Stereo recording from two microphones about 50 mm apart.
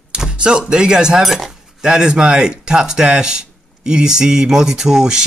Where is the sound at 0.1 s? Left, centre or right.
Centre.